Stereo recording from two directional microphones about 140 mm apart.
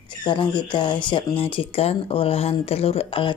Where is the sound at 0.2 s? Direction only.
35° left (ahead or behind).